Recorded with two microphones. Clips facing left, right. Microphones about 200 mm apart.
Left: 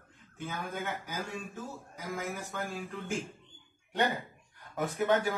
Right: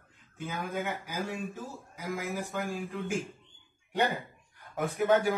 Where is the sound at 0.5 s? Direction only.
15° right (ahead or behind).